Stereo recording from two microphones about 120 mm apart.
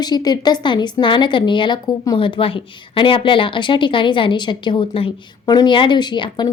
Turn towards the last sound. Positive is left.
turn(degrees=40)  # may be behind; listen again after turning